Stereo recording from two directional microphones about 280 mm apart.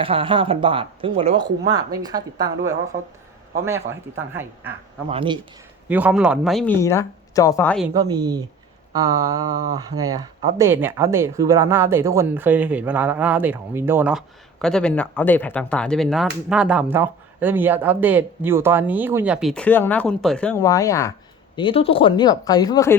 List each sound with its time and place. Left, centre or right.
0.0 s speech: centre
5.0 s speech: centre
5.9 s speech: centre
7.9 s a sound: centre
10.0 s speech: centre